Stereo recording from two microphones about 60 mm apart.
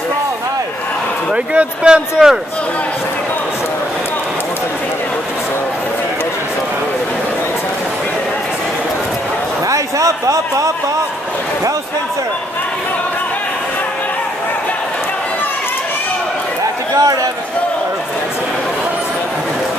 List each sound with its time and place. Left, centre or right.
1.3 s speech: centre
9.7 s a man's voice: right
16.9 s a man's voice: right